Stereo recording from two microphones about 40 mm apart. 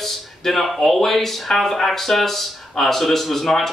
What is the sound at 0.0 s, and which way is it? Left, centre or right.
Speech, centre.